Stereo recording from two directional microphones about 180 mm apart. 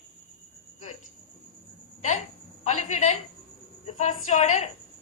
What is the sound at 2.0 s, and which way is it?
A woman's voice, 40° left (ahead or behind).